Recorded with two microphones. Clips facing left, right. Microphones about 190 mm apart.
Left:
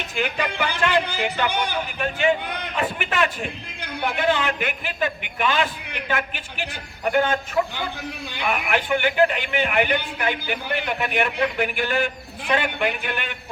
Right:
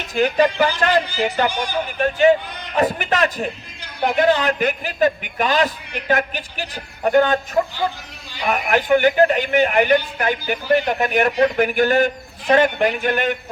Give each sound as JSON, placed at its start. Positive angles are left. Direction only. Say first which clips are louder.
{"t": 0.2, "sound": "a man's voice", "louder": "right 9 dB", "side_deg": -40}
{"t": 1.5, "sound": "speech", "louder": "right 2 dB", "side_deg": 60}
{"t": 2.0, "sound": "a man's voice", "louder": "right 7 dB", "side_deg": -40}